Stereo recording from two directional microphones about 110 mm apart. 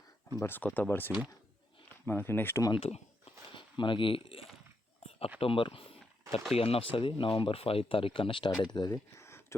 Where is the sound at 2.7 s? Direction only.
65° left (ahead or behind).